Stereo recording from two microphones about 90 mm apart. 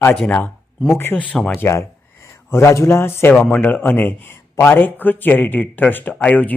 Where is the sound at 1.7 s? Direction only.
30° left (ahead or behind).